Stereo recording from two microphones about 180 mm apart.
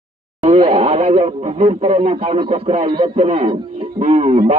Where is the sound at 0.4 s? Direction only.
30° right (ahead or behind).